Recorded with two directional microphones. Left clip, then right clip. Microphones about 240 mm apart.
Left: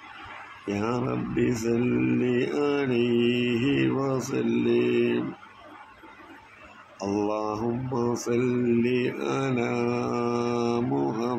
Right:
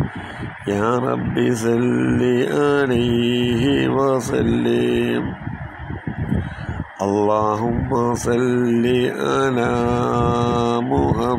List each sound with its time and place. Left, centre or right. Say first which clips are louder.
0.7 s mantra: right 9 dB; right
7.0 s mantra: right 10 dB; right